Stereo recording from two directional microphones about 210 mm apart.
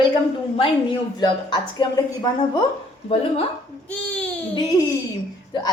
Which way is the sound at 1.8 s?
20° left (ahead or behind).